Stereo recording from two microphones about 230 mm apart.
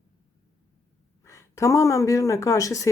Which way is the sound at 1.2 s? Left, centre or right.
Centre.